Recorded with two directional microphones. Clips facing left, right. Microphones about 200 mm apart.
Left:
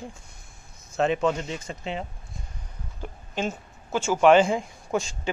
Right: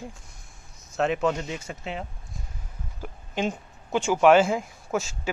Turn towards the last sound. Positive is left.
turn(degrees=-5)  # may be behind; listen again after turning